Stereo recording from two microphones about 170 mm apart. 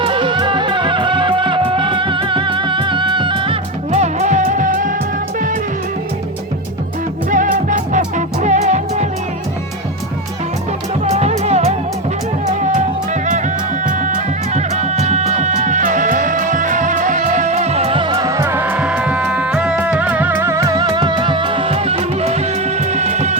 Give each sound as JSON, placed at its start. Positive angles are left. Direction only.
{"t": 0.0, "sound": "music", "side_deg": -30}
{"t": 3.9, "sound": "music", "side_deg": -45}
{"t": 7.3, "sound": "music", "side_deg": -50}
{"t": 11.1, "sound": "music", "side_deg": -40}
{"t": 13.8, "sound": "music", "side_deg": -50}